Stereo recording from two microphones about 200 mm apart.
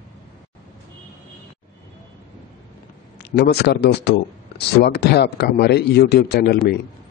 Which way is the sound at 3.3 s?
55° left (ahead or behind).